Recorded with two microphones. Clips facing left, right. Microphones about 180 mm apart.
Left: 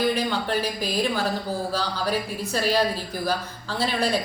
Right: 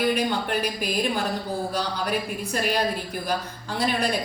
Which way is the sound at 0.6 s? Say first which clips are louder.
Even; 15° right (ahead or behind).